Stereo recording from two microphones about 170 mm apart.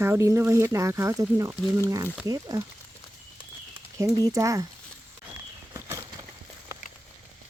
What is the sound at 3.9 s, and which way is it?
Speech, 20° right (ahead or behind).